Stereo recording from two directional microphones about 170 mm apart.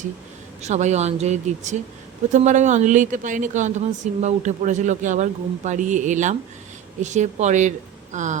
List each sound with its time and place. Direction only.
0.6 s speech: 40° right (ahead or behind)